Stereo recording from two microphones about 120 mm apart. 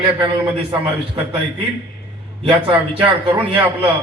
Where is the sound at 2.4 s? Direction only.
45° right (ahead or behind).